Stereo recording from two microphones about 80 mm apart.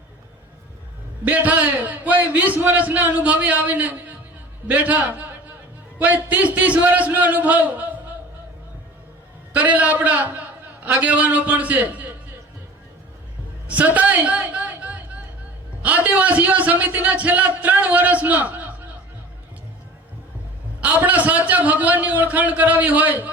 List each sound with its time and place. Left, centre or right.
1.2 s a man's voice: centre
9.5 s a man's voice: centre
13.7 s a sound: centre
15.8 s a man's voice: centre
20.8 s a man's voice: right